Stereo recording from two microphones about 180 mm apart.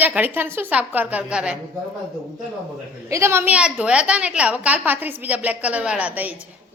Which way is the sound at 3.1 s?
15° right (ahead or behind).